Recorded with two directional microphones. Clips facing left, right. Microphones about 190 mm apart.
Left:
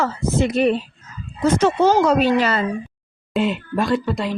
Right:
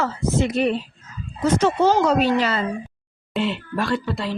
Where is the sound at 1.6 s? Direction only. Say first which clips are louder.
Left 2 dB; 55° left (ahead or behind).